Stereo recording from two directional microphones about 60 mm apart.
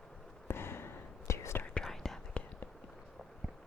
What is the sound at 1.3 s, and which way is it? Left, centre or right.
Whispering, left.